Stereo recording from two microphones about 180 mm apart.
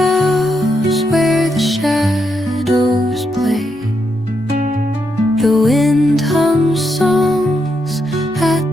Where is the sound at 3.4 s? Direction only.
Centre (ahead or behind).